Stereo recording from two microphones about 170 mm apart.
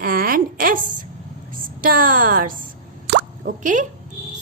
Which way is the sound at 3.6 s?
50° right (ahead or behind).